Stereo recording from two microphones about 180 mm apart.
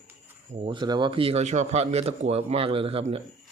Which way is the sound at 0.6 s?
25° right (ahead or behind).